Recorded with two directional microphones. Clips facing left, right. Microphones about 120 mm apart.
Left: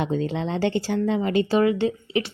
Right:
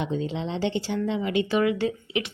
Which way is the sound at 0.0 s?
50° left (ahead or behind).